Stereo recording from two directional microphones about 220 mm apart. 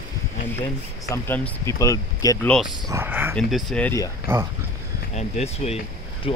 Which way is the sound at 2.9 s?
10° right (ahead or behind).